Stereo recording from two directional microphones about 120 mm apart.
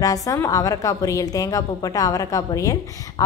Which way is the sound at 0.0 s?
30° left (ahead or behind).